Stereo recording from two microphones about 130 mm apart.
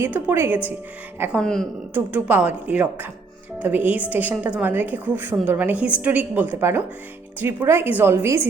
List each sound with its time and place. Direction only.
0.0 s a woman's voice: 15° right (ahead or behind)
1.4 s a woman's voice: 5° left (ahead or behind)
1.9 s a woman's voice: 10° right (ahead or behind)